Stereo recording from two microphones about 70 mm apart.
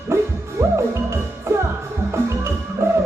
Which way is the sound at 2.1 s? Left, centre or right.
Right.